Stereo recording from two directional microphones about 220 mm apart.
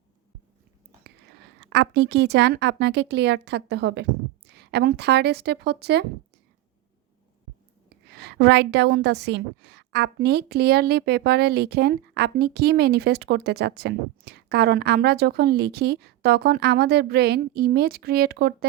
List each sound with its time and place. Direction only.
1.7 s a woman's voice: 50° right (ahead or behind)
8.0 s a woman's voice: 45° right (ahead or behind)